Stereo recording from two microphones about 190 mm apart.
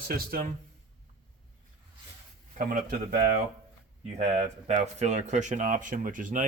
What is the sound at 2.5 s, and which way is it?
Speech, 45° right (ahead or behind).